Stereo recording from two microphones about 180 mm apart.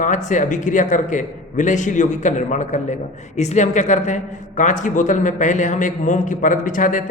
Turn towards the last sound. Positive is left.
turn(degrees=45)  # may be behind; listen again after turning